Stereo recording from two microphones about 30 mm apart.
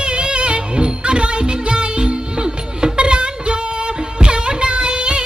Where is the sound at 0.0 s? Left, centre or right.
Right.